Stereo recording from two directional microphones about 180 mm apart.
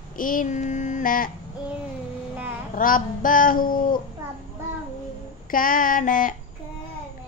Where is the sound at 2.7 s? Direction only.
50° left (ahead or behind).